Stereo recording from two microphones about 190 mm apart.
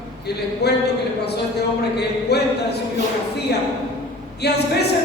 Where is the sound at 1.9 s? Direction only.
60° left (ahead or behind).